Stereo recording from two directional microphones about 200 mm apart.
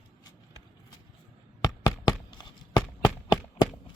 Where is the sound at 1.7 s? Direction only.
20° left (ahead or behind).